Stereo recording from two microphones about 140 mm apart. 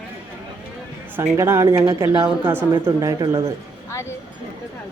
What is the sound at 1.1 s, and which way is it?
Speech, 15° right (ahead or behind).